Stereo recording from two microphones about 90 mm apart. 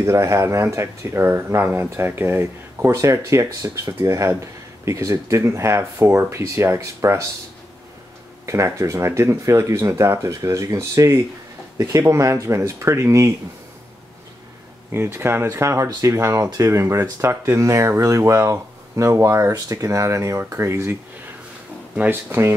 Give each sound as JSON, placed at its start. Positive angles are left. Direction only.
{"t": 0.0, "sound": "speech", "side_deg": -35}
{"t": 8.5, "sound": "speech", "side_deg": -35}
{"t": 14.9, "sound": "speech", "side_deg": -25}
{"t": 21.9, "sound": "speech", "side_deg": -20}